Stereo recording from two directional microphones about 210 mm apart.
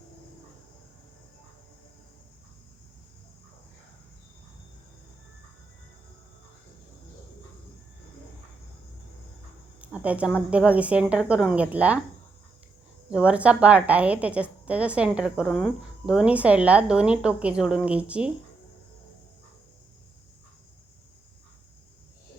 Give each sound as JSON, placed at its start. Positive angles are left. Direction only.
{"t": 9.8, "sound": "a woman's voice", "side_deg": -5}
{"t": 13.1, "sound": "a woman's voice", "side_deg": -5}